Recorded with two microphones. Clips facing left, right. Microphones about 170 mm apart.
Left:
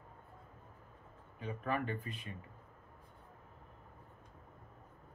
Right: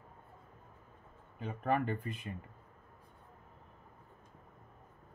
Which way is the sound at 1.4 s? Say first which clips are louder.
Right 4 dB; 45° right (ahead or behind).